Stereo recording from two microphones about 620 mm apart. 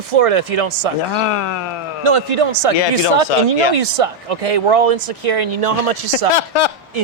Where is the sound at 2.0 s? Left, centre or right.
Right.